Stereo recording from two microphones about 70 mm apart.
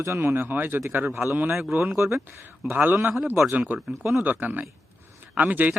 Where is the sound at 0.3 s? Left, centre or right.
Right.